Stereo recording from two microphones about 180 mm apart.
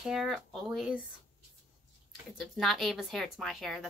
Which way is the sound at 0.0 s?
Centre (ahead or behind).